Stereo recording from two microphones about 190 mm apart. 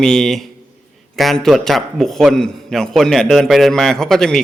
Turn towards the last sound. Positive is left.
turn(degrees=0)  # may be behind; listen again after turning